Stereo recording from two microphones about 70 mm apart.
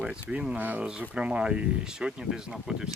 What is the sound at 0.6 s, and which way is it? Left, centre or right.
Speech, right.